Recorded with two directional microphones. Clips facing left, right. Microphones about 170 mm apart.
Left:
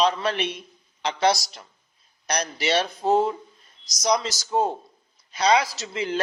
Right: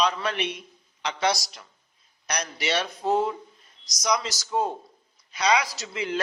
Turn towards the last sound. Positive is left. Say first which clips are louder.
# left 2 dB
turn(degrees=30)  # may be behind; listen again after turning